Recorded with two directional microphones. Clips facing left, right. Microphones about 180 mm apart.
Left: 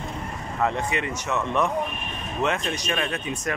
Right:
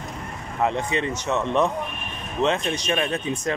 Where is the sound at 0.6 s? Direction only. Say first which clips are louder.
Right 2 dB; 20° right (ahead or behind).